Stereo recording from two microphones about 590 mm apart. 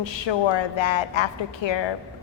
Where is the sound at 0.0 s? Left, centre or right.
Left.